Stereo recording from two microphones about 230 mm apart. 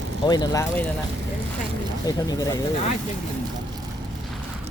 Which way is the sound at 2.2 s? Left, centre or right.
Centre.